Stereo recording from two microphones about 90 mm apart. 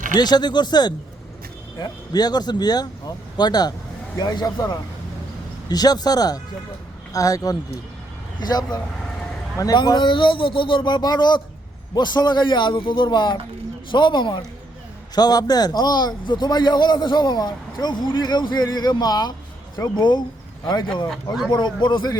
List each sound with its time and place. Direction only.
0.2 s a man's voice: 50° left (ahead or behind)
15.1 s a man's voice: 50° left (ahead or behind)